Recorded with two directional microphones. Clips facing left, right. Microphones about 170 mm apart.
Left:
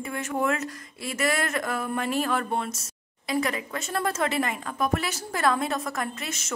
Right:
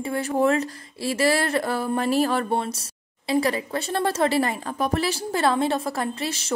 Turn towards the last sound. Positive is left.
turn(degrees=-30)  # may be behind; listen again after turning